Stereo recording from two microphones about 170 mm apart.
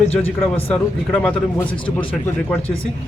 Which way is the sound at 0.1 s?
35° left (ahead or behind).